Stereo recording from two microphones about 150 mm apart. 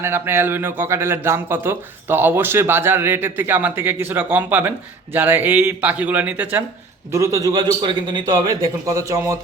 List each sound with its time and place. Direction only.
0.0 s a man's voice: 15° right (ahead or behind)